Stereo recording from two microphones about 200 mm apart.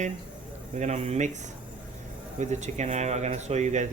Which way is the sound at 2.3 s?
35° right (ahead or behind).